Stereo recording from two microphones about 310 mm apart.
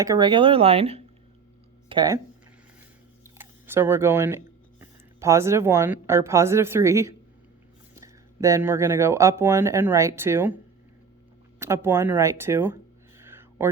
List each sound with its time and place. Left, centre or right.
0.0 s speech: centre
3.3 s speech: centre
11.6 s a sound: centre